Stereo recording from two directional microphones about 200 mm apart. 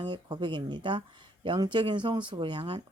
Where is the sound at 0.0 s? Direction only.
20° right (ahead or behind).